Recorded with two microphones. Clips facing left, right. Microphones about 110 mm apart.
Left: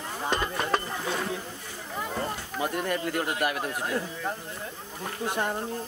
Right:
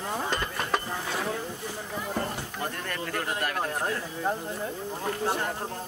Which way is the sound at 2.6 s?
10° left (ahead or behind).